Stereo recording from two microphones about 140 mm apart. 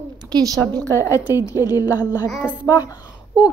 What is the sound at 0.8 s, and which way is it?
A woman's voice, 20° left (ahead or behind).